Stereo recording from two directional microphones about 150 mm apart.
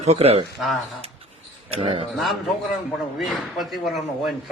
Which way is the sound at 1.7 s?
40° right (ahead or behind).